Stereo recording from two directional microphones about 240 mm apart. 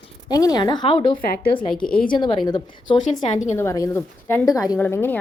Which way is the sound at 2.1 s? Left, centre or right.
Centre.